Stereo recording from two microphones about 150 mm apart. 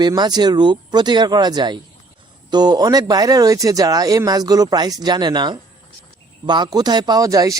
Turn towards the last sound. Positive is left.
turn(degrees=-20)  # may be behind; listen again after turning